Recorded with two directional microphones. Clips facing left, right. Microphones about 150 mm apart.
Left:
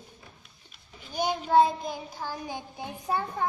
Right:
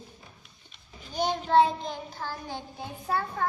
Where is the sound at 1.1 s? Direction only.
10° left (ahead or behind).